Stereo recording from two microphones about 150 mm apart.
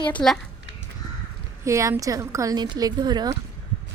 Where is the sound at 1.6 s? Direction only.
20° right (ahead or behind).